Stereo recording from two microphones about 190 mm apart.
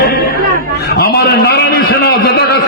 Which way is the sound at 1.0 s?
55° left (ahead or behind).